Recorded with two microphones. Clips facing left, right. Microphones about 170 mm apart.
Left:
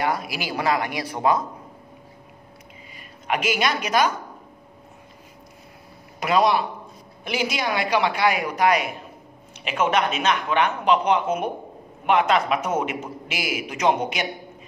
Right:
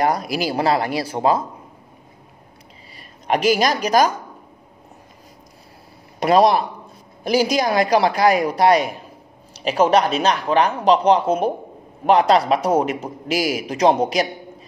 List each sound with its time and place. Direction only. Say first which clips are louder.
0.0 s a man's voice: right 6 dB; 40° right (ahead or behind)
3.3 s a man's voice: right 6 dB; 35° right (ahead or behind)
6.1 s a man's voice: right 5 dB; 35° right (ahead or behind)